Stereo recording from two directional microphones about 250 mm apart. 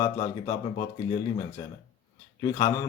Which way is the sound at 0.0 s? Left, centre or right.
Centre.